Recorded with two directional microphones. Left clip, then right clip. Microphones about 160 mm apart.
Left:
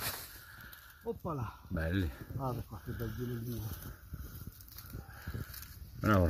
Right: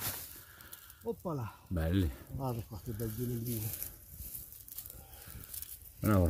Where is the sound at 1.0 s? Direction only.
5° left (ahead or behind).